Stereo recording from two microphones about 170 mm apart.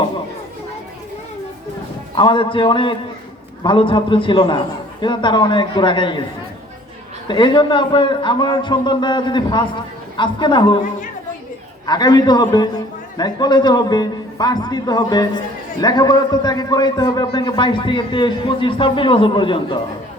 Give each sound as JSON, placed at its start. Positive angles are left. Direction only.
{"t": 2.1, "sound": "a man's voice", "side_deg": 30}
{"t": 7.3, "sound": "a man's voice", "side_deg": 25}
{"t": 11.9, "sound": "a man's voice", "side_deg": 25}